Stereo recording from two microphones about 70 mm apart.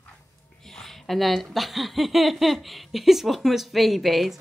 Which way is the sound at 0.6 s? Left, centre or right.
Centre.